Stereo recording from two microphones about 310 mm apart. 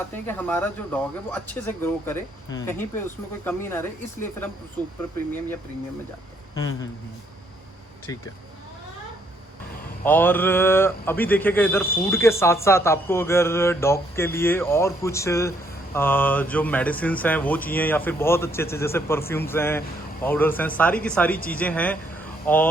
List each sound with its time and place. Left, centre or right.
0.3 s speech: centre
6.5 s speech: centre
10.0 s speech: centre